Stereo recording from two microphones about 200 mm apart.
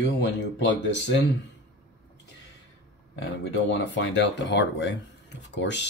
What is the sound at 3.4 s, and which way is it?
Speech, 65° left (ahead or behind).